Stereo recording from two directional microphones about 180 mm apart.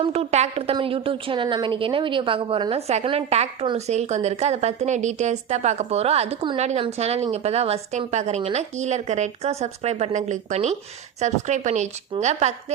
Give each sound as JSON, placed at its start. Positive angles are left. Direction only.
{"t": 0.0, "sound": "a woman's voice", "side_deg": -35}